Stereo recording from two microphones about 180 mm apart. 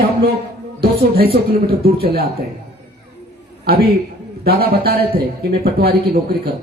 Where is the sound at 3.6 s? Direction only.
60° right (ahead or behind).